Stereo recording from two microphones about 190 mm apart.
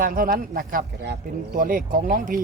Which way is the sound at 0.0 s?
45° right (ahead or behind).